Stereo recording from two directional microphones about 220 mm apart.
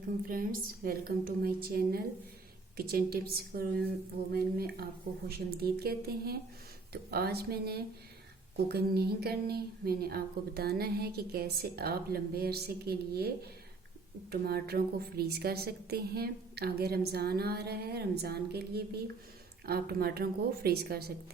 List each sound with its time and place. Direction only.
0.3 s a woman's voice: 40° right (ahead or behind)